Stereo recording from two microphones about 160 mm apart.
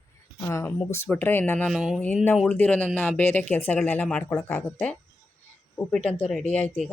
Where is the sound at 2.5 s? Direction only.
10° left (ahead or behind).